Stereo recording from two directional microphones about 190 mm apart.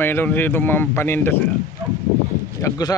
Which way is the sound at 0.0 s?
10° left (ahead or behind).